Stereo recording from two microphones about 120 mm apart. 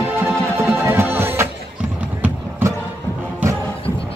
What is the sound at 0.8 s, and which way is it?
Music, 20° right (ahead or behind).